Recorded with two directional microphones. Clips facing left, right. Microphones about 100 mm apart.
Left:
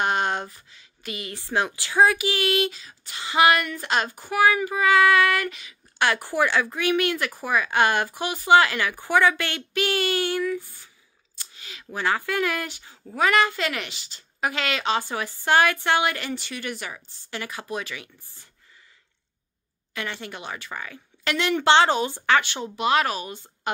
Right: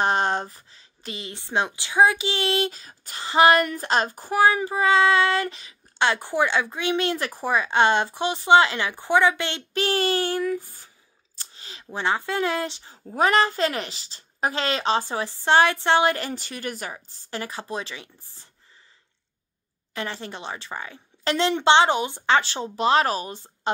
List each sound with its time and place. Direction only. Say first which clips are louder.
0.0 s speech: right 2 dB; 35° right (ahead or behind)
6.2 s speech: even; 20° right (ahead or behind)
9.8 s speech: right 1 dB; 35° right (ahead or behind)
19.9 s speech: right 1 dB; 35° right (ahead or behind)